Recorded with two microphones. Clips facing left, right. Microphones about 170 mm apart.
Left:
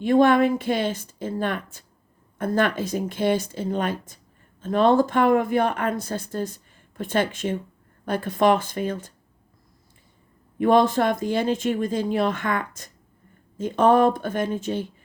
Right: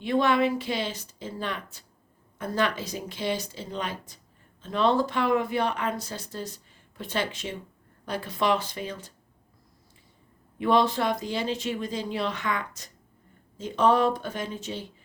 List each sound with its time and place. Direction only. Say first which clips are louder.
0.0 s speech: left 6 dB; 50° left (ahead or behind)
10.6 s speech: left 5 dB; 50° left (ahead or behind)